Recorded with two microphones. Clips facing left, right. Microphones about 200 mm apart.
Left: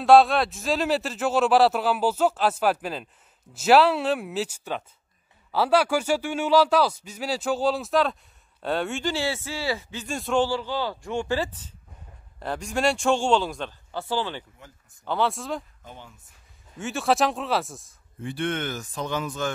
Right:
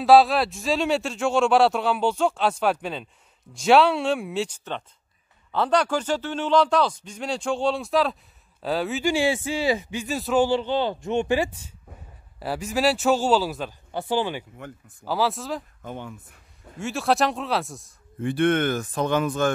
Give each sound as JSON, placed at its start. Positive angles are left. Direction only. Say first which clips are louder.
{"t": 0.0, "sound": "a man's voice", "louder": "even", "side_deg": 0}
{"t": 9.1, "sound": "speech", "louder": "right 6 dB", "side_deg": -15}
{"t": 10.5, "sound": "a man's voice", "louder": "right 5 dB", "side_deg": -20}
{"t": 14.6, "sound": "speech", "louder": "right 10 dB", "side_deg": -60}
{"t": 15.0, "sound": "a man's voice", "louder": "right 1 dB", "side_deg": -5}
{"t": 15.8, "sound": "speech", "louder": "right 9 dB", "side_deg": -55}
{"t": 16.7, "sound": "a man's voice", "louder": "right 1 dB", "side_deg": 0}
{"t": 18.2, "sound": "speech", "louder": "right 7 dB", "side_deg": -55}